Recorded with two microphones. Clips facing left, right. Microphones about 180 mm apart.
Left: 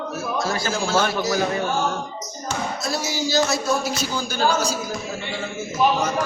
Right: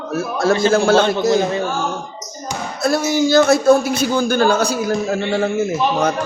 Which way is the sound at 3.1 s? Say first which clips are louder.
Right 9 dB; 55° right (ahead or behind).